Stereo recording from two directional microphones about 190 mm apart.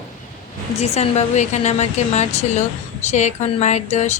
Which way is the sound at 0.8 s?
35° left (ahead or behind).